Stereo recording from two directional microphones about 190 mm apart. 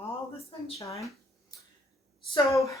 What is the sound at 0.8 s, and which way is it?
Speech, 15° left (ahead or behind).